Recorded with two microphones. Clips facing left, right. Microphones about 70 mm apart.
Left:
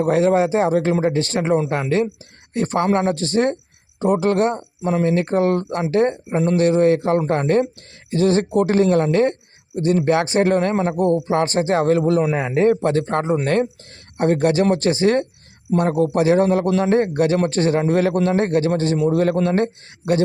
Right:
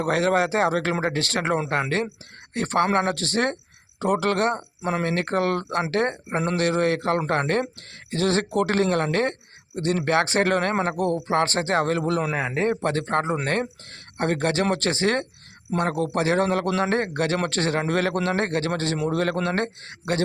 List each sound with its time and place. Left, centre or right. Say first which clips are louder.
0.0 s speech: left 5 dB; right
2.5 s a man's voice: left 3 dB; right
3.2 s speech: left 5 dB; right
5.9 s a man's voice: left 10 dB; right
11.0 s speech: left 6 dB; centre
11.7 s a man's voice: left 8 dB; right
12.2 s a man's voice: left 5 dB; centre
12.8 s a man's voice: left 4 dB; right